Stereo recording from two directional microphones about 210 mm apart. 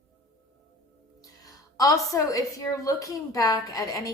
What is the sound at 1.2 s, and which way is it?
A woman's voice, 15° left (ahead or behind).